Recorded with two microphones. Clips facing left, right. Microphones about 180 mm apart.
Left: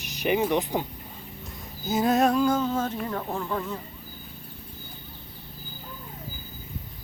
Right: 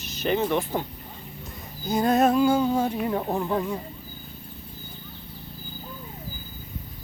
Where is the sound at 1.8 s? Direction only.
5° left (ahead or behind); by 3.8 s 15° right (ahead or behind).